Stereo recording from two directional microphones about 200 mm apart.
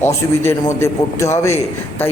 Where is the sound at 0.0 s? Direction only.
15° left (ahead or behind).